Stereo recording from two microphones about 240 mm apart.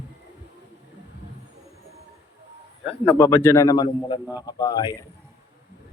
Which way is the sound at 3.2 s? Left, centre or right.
Centre.